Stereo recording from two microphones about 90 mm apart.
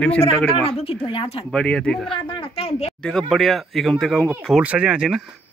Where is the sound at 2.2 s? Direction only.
80° left.